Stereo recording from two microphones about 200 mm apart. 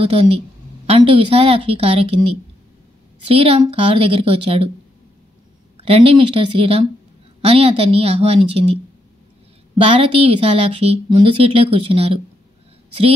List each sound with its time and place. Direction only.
0.0 s a woman's voice: 30° right (ahead or behind)
3.3 s a woman's voice: 30° right (ahead or behind)
5.8 s a woman's voice: 30° right (ahead or behind)
9.8 s a woman's voice: 30° right (ahead or behind)